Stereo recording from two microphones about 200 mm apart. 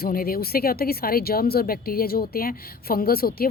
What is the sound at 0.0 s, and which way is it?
Speech, 45° left (ahead or behind).